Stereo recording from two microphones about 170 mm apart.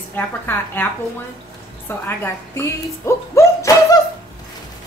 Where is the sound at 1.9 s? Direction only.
15° left (ahead or behind).